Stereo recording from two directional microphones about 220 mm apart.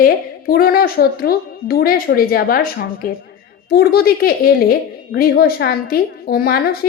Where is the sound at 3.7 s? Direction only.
45° left (ahead or behind).